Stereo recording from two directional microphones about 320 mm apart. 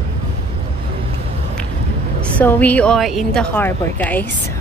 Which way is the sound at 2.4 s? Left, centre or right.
Centre.